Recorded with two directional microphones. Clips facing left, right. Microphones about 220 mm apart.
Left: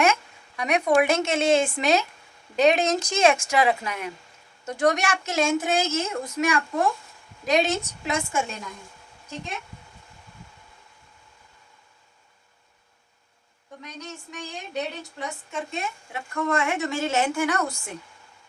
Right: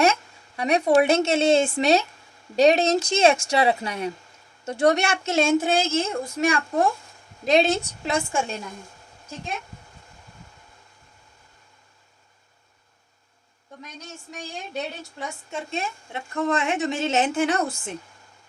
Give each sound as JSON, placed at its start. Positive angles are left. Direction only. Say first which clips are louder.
{"t": 0.0, "sound": "a woman's voice", "louder": "right 2 dB", "side_deg": -35}
{"t": 15.7, "sound": "a woman's voice", "louder": "right 2 dB", "side_deg": -25}